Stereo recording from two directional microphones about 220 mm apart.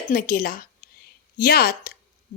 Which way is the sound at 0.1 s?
40° left (ahead or behind).